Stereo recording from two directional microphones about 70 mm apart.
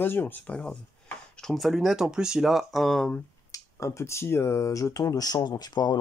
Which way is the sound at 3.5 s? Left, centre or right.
Left.